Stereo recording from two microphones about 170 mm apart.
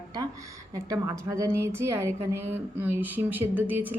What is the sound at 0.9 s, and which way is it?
A woman's voice, 20° right (ahead or behind).